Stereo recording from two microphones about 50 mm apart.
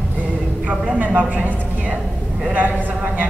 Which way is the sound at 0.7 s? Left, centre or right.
Right.